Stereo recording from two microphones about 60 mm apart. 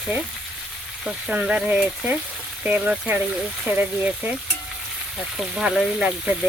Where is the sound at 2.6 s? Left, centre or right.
Right.